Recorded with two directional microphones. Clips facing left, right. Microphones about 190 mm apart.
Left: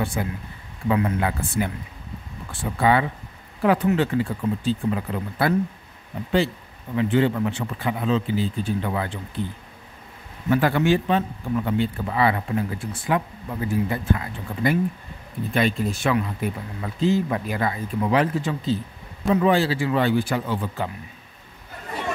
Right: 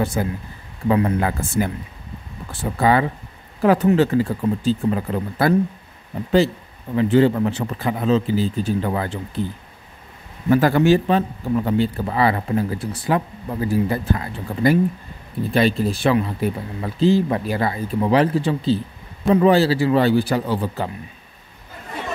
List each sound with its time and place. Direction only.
0.0 s a man's voice: 40° right (ahead or behind)
7.0 s a man's voice: 35° right (ahead or behind)
10.5 s a man's voice: 40° right (ahead or behind)